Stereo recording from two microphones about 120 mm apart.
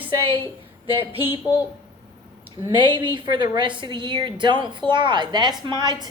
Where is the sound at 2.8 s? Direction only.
40° right (ahead or behind).